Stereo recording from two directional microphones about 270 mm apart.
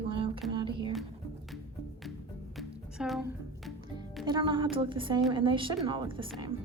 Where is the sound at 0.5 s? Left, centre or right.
Centre.